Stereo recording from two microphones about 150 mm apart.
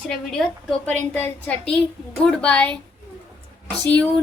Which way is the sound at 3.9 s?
10° left (ahead or behind).